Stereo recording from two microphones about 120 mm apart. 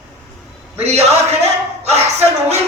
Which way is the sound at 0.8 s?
65° right (ahead or behind).